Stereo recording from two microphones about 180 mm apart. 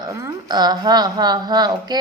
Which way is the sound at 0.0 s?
15° right (ahead or behind).